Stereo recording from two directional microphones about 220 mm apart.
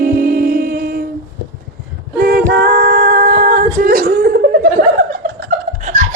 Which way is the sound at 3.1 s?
40° right (ahead or behind).